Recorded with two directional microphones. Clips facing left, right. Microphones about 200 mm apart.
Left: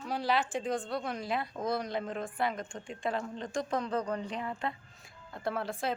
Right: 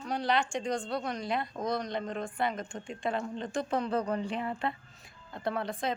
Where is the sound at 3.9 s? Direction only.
30° right (ahead or behind).